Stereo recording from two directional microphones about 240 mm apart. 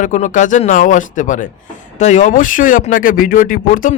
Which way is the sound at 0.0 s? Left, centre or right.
Left.